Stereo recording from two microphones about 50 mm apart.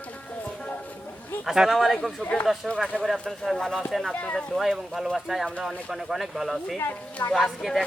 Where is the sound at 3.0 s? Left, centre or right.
Centre.